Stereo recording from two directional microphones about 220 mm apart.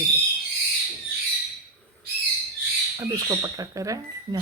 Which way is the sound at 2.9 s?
15° right (ahead or behind).